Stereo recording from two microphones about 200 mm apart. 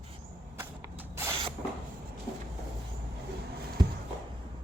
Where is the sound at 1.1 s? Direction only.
15° right (ahead or behind).